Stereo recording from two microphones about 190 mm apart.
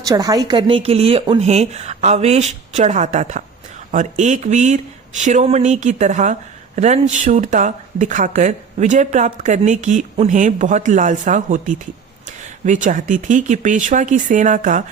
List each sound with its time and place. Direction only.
0.0 s speech: 20° right (ahead or behind); by 14.8 s 40° right (ahead or behind)